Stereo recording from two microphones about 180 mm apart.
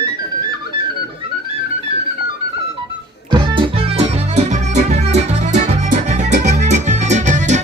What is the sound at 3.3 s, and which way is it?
Music, 25° right (ahead or behind).